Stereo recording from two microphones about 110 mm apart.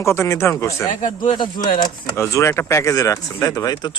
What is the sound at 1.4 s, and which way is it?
Speech, 45° left (ahead or behind).